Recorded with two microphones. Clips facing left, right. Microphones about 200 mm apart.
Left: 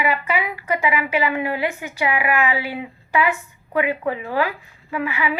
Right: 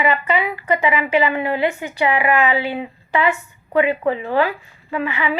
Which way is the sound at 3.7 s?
5° left (ahead or behind).